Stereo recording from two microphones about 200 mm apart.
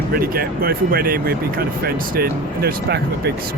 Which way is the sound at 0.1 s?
50° right (ahead or behind).